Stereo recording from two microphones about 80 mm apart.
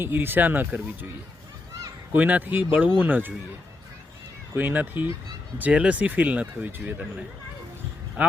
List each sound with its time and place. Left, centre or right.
0.0 s speech: right
2.1 s speech: centre
4.5 s speech: right